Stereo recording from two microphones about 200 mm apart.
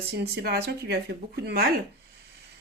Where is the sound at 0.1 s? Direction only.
55° right (ahead or behind).